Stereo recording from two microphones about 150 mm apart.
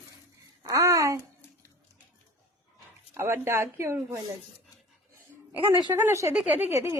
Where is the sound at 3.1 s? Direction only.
15° right (ahead or behind).